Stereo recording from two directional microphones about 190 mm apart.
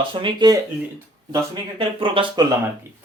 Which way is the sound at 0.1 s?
25° right (ahead or behind).